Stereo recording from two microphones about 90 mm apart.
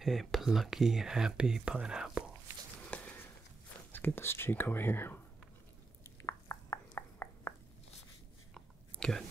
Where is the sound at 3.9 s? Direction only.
25° left (ahead or behind).